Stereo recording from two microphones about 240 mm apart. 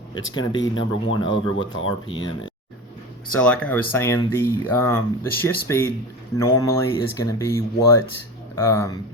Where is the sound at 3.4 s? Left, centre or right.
Centre.